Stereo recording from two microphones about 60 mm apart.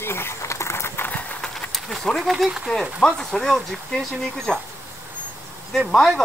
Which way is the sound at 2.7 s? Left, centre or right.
Centre.